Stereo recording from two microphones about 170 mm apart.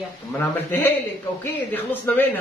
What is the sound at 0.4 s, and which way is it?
A man's voice, 15° left (ahead or behind).